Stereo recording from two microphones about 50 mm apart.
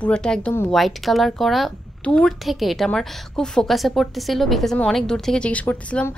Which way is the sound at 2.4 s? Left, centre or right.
Centre.